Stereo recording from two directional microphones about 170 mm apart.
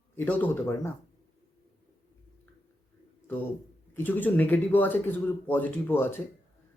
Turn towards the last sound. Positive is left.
turn(degrees=10)  # may be behind; listen again after turning